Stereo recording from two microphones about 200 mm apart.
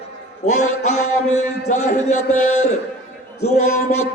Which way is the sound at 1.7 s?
35° left (ahead or behind).